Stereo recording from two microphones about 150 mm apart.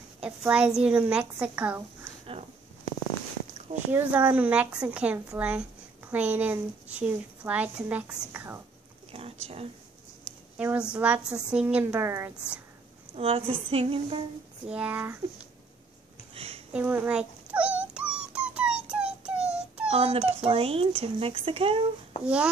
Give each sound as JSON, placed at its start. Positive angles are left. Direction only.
{"t": 0.5, "sound": "a woman's voice", "side_deg": -5}
{"t": 3.9, "sound": "a woman's voice", "side_deg": -10}
{"t": 9.1, "sound": "a sound", "side_deg": -40}
{"t": 10.6, "sound": "a woman's voice", "side_deg": -10}
{"t": 13.1, "sound": "speech", "side_deg": -40}
{"t": 14.7, "sound": "a woman's voice", "side_deg": -10}
{"t": 16.7, "sound": "dog", "side_deg": -10}
{"t": 19.9, "sound": "speech", "side_deg": -40}
{"t": 22.2, "sound": "a woman's voice", "side_deg": -10}